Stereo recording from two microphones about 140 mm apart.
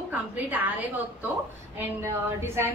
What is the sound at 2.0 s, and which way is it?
Speech, 20° right (ahead or behind).